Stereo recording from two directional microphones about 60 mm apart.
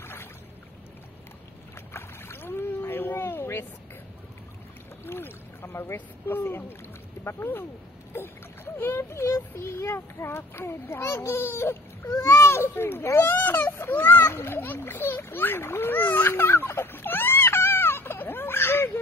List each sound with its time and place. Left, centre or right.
0.0 s boat: left
2.0 s rowboat: left
5.0 s boat: left
5.9 s speech: left
9.2 s speech: left
9.7 s a child's voice: left
13.4 s speech: left
14.2 s a sound: left